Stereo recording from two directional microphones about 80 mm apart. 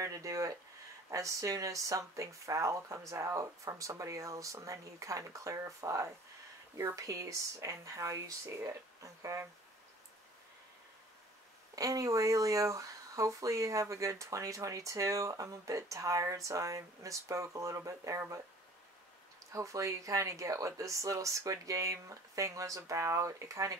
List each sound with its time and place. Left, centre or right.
0.0 s speech: right
11.7 s speech: right
19.5 s speech: right